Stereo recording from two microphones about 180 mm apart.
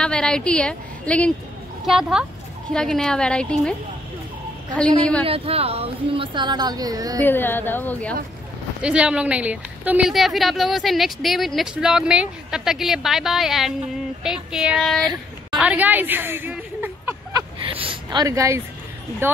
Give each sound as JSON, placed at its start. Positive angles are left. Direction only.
{"t": 0.0, "sound": "a woman's voice", "side_deg": 5}
{"t": 4.7, "sound": "a woman's voice", "side_deg": 5}
{"t": 5.2, "sound": "a woman's voice", "side_deg": -35}
{"t": 7.2, "sound": "a woman's voice", "side_deg": 10}
{"t": 8.8, "sound": "a woman's voice", "side_deg": -5}
{"t": 15.5, "sound": "a sound", "side_deg": -5}
{"t": 17.6, "sound": "a sound", "side_deg": -30}
{"t": 18.2, "sound": "speech", "side_deg": -15}